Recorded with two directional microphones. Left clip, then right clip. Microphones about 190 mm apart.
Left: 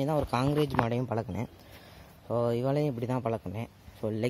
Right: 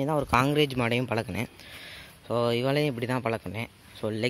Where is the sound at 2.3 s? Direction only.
5° right (ahead or behind).